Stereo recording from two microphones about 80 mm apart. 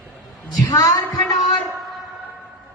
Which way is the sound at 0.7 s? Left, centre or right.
Left.